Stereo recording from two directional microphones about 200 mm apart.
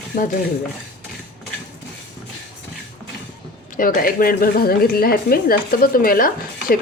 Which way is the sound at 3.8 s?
45° left (ahead or behind).